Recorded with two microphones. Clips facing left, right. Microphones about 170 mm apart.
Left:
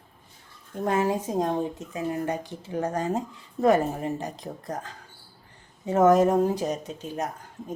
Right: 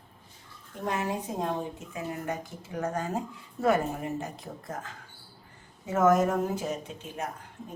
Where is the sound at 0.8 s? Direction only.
45° left (ahead or behind).